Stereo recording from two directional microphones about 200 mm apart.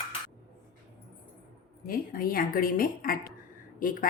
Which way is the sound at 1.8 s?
45° left (ahead or behind).